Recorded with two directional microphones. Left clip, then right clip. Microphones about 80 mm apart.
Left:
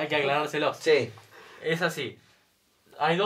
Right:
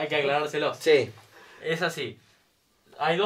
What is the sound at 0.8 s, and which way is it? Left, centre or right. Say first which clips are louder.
Speech: right 3 dB; right.